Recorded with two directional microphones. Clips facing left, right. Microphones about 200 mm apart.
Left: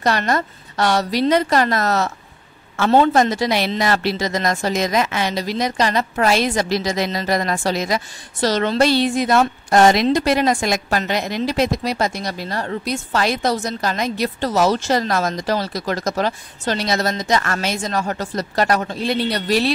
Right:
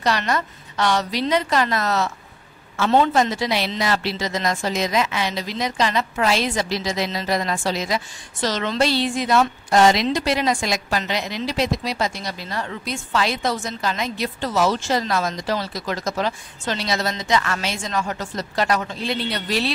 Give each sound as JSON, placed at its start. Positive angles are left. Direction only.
{"t": 0.0, "sound": "a woman's voice", "side_deg": 50}